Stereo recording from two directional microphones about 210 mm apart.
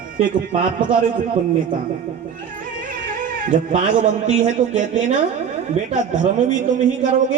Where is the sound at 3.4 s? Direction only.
40° right (ahead or behind).